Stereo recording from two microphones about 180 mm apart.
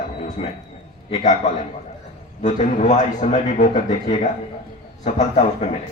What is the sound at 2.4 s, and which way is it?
A man's voice, 40° left (ahead or behind).